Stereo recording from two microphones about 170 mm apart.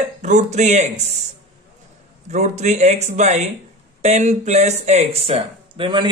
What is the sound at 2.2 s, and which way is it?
A man's voice, 40° right (ahead or behind).